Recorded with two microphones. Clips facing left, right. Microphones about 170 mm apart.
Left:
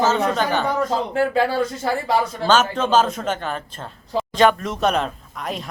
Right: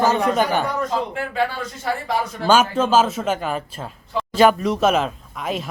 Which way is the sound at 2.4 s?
10° right (ahead or behind).